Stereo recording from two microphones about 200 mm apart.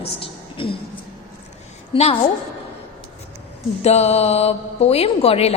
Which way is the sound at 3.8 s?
30° left (ahead or behind).